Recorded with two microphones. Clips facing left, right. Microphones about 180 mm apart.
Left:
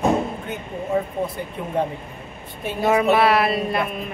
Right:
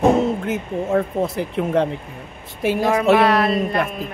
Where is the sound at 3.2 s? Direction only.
5° left (ahead or behind).